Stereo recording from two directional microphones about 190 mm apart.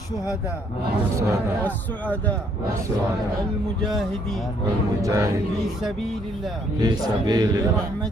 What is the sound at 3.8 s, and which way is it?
Speech, centre (ahead or behind).